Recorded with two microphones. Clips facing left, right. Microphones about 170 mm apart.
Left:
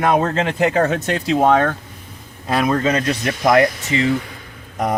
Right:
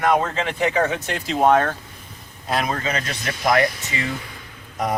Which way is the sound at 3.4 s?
50° left (ahead or behind).